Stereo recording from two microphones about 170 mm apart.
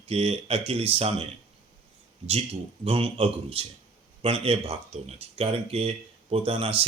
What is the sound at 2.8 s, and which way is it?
Speech, 35° right (ahead or behind).